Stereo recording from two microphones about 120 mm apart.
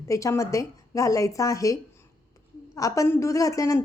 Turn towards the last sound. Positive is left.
turn(degrees=25)  # may be behind; listen again after turning